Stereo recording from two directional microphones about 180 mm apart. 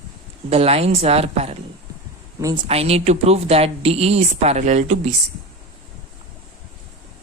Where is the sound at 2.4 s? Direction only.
20° right (ahead or behind).